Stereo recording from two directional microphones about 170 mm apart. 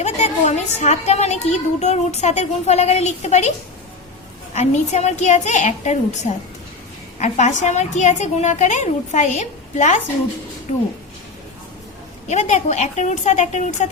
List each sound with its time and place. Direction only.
0.0 s a woman's voice: 40° left (ahead or behind)
4.5 s a woman's voice: 40° left (ahead or behind)
12.3 s a woman's voice: 45° left (ahead or behind)